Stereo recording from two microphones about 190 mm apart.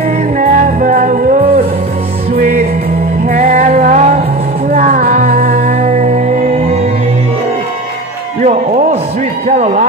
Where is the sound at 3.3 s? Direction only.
45° right (ahead or behind).